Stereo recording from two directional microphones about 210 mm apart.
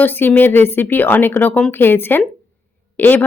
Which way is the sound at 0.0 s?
10° left (ahead or behind).